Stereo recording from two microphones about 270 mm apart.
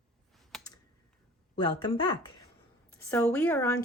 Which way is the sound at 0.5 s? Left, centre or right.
Centre.